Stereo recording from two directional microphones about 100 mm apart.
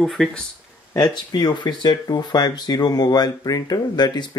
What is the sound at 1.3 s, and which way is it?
Speech, 45° left (ahead or behind).